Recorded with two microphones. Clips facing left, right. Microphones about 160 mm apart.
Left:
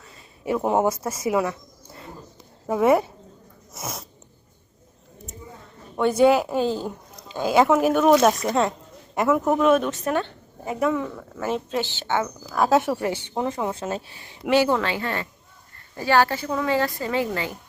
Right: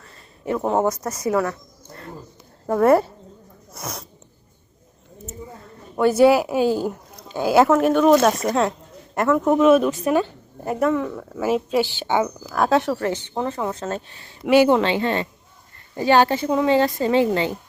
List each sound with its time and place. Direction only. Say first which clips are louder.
0.0 s a sound: right 1 dB; centre (ahead or behind)
0.5 s speech: right 1 dB; 10° left (ahead or behind)
1.1 s speech: right 2 dB; 20° left (ahead or behind)
2.6 s speech: right 3 dB; 5° left (ahead or behind)
6.0 s a woman's voice: right 3 dB; 5° right (ahead or behind)
12.5 s speech: left 1 dB; centre (ahead or behind)
14.5 s a woman's voice: right 5 dB; 20° right (ahead or behind)